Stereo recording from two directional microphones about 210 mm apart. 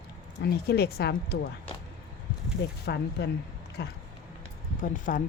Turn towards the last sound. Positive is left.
turn(degrees=40)  # may be behind; listen again after turning